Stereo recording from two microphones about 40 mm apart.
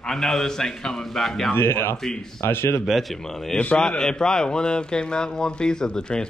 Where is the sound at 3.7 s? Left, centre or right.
Centre.